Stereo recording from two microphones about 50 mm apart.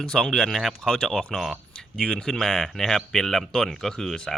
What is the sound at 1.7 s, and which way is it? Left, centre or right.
Speech, centre.